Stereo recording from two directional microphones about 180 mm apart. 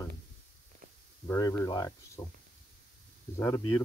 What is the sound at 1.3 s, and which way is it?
Speech, 20° left (ahead or behind).